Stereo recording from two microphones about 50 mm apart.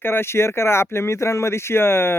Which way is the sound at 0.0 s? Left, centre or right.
Left.